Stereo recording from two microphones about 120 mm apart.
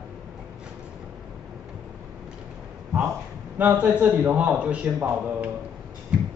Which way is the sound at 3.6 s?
15° right (ahead or behind).